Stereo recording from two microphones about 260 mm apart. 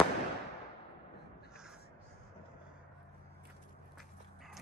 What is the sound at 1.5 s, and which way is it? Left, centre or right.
Crow, centre.